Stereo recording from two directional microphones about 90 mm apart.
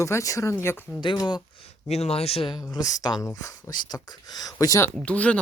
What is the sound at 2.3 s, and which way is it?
Speech, 80° left.